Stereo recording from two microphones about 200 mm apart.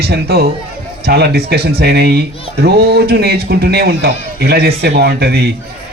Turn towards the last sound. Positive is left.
turn(degrees=-55)  # may be behind; listen again after turning